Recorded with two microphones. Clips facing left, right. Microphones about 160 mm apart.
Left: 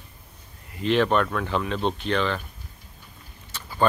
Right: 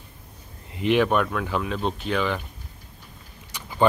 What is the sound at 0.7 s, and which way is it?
Speech, 15° right (ahead or behind).